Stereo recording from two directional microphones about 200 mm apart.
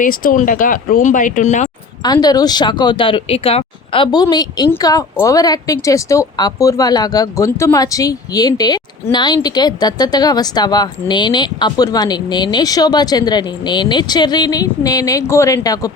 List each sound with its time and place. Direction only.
0.0 s speech: 45° left (ahead or behind)
2.2 s a woman's voice: 20° left (ahead or behind)